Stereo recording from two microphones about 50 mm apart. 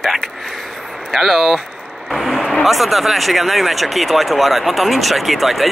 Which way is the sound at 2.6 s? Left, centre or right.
Centre.